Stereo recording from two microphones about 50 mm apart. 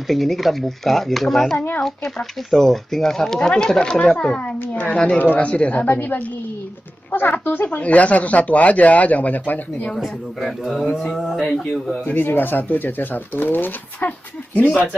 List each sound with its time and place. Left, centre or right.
0.1 s speech: centre
5.0 s speech: left
5.9 s speech: left
7.6 s speech: left
9.9 s speech: centre
11.4 s speech: centre
12.1 s speech: left